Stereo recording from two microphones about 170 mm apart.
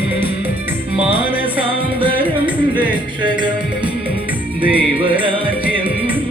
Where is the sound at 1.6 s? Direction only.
30° right (ahead or behind).